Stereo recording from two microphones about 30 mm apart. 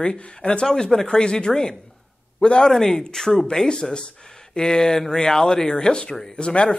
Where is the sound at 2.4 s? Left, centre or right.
Left.